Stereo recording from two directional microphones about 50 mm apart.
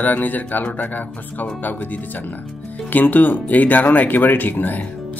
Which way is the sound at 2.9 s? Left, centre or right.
Left.